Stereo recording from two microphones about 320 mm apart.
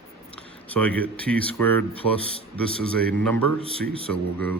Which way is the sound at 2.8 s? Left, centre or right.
Centre.